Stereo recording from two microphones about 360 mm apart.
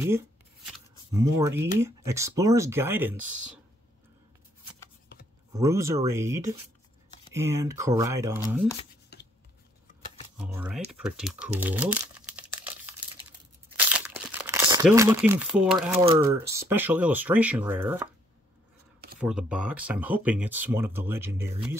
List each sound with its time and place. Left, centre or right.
1.1 s speech: centre
5.6 s speech: centre
9.1 s a sound: left
10.3 s speech: centre
11.6 s crumpling: centre
16.1 s speech: centre
19.1 s speech: centre